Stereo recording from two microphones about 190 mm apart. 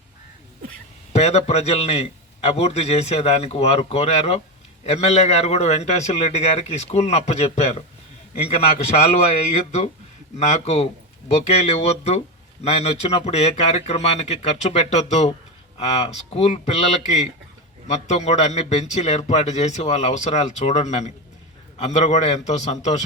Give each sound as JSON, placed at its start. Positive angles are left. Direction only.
{"t": 1.1, "sound": "a man's voice", "side_deg": 35}